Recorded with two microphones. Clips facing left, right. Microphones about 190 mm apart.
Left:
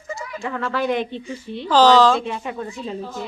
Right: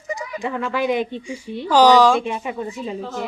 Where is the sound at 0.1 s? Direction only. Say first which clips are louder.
Right 2 dB; 15° right (ahead or behind).